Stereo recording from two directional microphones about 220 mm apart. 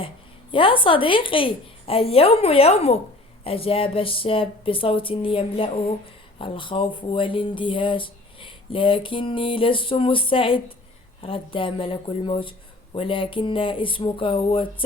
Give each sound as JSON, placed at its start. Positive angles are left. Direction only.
{"t": 0.5, "sound": "speech", "side_deg": 25}